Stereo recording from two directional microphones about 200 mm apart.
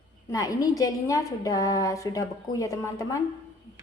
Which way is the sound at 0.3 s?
15° left (ahead or behind).